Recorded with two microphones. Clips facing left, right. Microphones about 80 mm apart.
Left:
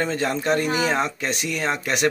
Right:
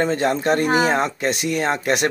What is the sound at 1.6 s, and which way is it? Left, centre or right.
Speech, right.